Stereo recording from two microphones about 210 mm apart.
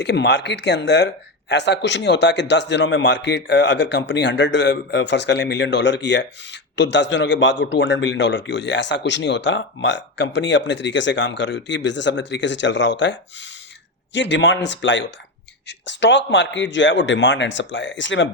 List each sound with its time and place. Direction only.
0.0 s speech: 55° left (ahead or behind)